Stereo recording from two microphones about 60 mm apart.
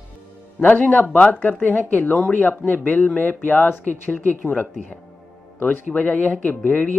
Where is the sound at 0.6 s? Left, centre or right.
Left.